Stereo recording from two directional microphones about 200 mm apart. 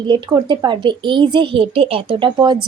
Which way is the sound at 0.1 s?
20° right (ahead or behind).